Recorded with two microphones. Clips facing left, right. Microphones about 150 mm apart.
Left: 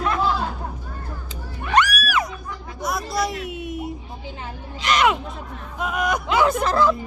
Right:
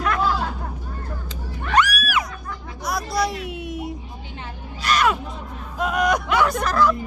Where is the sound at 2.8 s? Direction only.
Centre (ahead or behind).